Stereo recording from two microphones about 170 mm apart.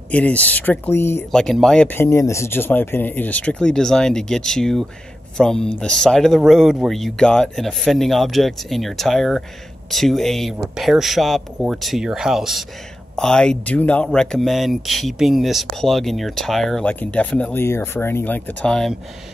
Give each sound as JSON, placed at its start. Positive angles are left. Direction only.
{"t": 0.1, "sound": "speech", "side_deg": 10}
{"t": 1.3, "sound": "speech", "side_deg": 0}